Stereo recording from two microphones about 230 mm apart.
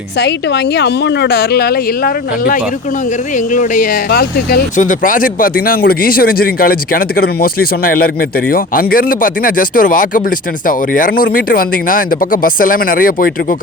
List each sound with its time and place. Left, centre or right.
0.2 s a woman's voice: left